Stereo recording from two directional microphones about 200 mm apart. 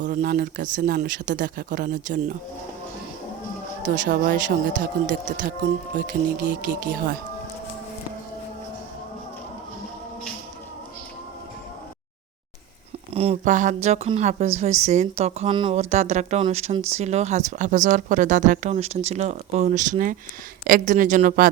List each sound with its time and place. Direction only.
0.0 s a man's voice: 45° right (ahead or behind)
3.8 s a woman's voice: 40° right (ahead or behind)
13.1 s a woman's voice: 30° right (ahead or behind)